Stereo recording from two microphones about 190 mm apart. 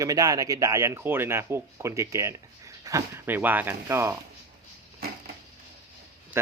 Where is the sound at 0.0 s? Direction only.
20° right (ahead or behind).